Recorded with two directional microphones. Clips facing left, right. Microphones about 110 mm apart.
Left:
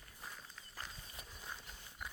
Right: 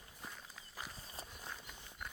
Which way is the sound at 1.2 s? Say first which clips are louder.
Right 7 dB; 30° right (ahead or behind).